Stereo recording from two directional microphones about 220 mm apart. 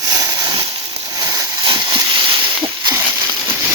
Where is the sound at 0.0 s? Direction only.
15° right (ahead or behind).